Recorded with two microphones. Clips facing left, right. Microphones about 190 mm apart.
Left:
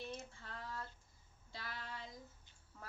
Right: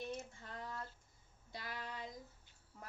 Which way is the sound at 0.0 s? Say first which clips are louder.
Right 3 dB; 10° right (ahead or behind).